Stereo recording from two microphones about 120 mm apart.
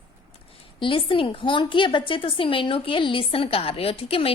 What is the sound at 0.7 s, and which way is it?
A woman's voice, 45° left (ahead or behind).